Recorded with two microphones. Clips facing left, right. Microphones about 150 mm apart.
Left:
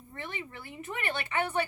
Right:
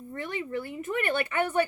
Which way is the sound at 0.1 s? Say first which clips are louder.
Right 8 dB; 45° right (ahead or behind).